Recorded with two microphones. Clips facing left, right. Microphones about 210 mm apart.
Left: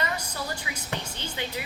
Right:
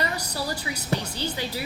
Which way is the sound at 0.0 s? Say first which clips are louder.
Right 3 dB; 35° right (ahead or behind).